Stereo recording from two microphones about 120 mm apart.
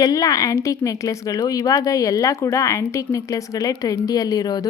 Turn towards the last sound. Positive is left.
turn(degrees=35)  # may be behind; listen again after turning